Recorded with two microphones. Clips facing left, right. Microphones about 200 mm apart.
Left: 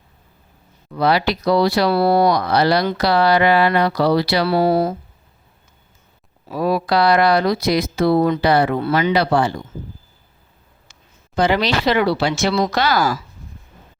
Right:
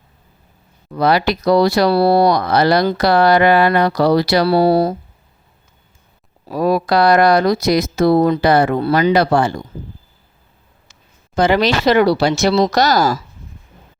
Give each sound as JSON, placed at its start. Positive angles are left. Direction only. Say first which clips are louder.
{"t": 0.9, "sound": "speech", "louder": "right 2 dB", "side_deg": -45}
{"t": 6.4, "sound": "speech", "louder": "right 3 dB", "side_deg": -40}
{"t": 11.3, "sound": "speech", "louder": "right 3 dB", "side_deg": -45}